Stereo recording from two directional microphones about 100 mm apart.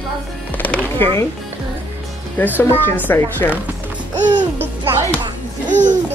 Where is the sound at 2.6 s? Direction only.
20° left (ahead or behind).